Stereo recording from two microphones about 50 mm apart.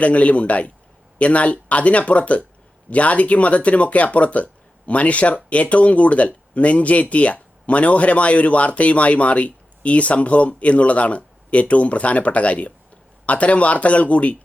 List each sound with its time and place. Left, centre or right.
0.0 s speech: left